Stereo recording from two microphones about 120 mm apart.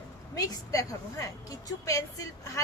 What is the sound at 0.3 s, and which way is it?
Female singing, 30° left (ahead or behind).